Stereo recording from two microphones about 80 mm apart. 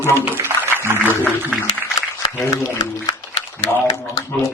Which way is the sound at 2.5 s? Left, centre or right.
Left.